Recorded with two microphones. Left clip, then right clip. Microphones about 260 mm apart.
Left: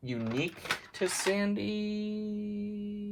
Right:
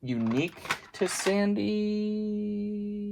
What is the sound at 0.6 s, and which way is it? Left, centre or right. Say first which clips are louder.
Speech: right 2 dB; right.